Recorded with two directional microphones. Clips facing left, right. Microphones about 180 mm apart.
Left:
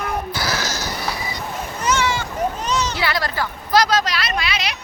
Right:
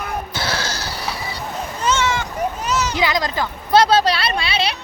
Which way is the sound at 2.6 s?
5° right (ahead or behind).